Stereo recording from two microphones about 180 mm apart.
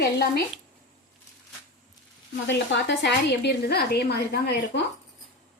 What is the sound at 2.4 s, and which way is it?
A woman's voice, 85° left.